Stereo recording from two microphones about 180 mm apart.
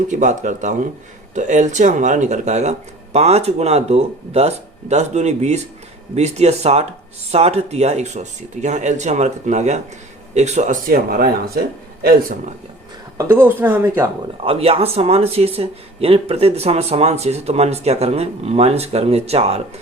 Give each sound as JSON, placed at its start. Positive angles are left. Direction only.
{"t": 0.1, "sound": "speech", "side_deg": -45}
{"t": 13.1, "sound": "speech", "side_deg": -15}
{"t": 14.4, "sound": "speech", "side_deg": -30}